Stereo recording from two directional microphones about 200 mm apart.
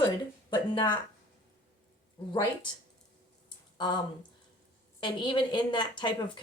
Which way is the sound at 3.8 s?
20° left (ahead or behind).